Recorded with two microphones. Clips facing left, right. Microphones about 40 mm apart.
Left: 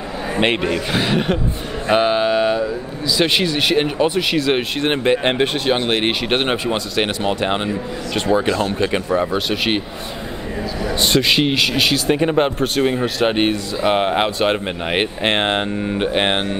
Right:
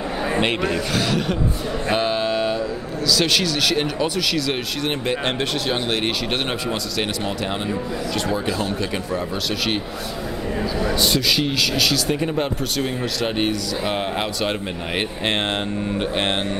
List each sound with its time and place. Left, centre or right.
0.4 s speech: left
8.5 s speech: centre
8.7 s speech: left
11.0 s speech: left
12.8 s speech: left